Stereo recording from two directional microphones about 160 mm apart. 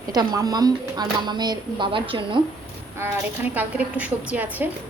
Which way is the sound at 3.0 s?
10° right (ahead or behind).